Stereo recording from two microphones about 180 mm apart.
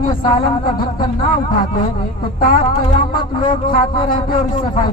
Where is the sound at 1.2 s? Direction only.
50° left (ahead or behind).